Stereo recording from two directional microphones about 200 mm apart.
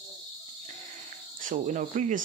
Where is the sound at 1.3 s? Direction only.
40° right (ahead or behind).